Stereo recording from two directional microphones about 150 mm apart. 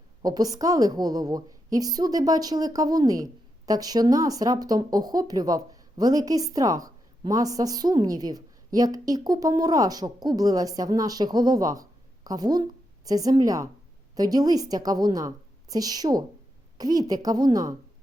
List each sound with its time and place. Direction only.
0.2 s speech: 25° right (ahead or behind)